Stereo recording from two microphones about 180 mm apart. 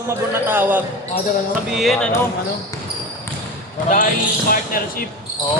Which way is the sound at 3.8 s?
45° left (ahead or behind).